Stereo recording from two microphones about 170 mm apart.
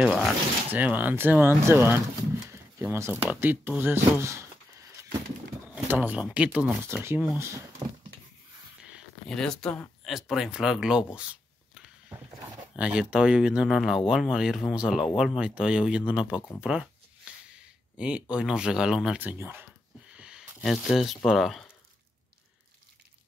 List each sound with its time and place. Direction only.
0.0 s speech: centre (ahead or behind)
5.9 s speech: 10° right (ahead or behind)
8.9 s a sound: 5° left (ahead or behind)
10.1 s speech: centre (ahead or behind)
16.6 s a sound: 5° right (ahead or behind)
18.3 s speech: 5° right (ahead or behind)